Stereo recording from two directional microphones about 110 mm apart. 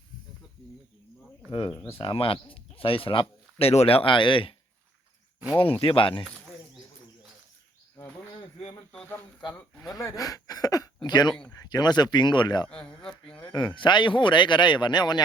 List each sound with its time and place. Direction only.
1.5 s speech: 50° left (ahead or behind)
5.5 s speech: 55° left (ahead or behind)
9.9 s speech: 30° left (ahead or behind)
12.7 s speech: 5° left (ahead or behind)
13.4 s speech: 45° left (ahead or behind)